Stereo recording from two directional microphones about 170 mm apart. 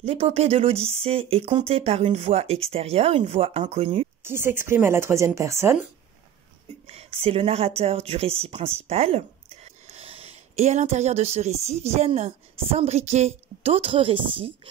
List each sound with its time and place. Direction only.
0.0 s speech: 35° right (ahead or behind)
4.2 s speech: 15° right (ahead or behind)
6.9 s speech: 35° right (ahead or behind)